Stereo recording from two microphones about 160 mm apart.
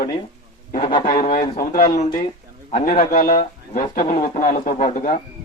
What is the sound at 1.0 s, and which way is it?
Speech, 50° left (ahead or behind).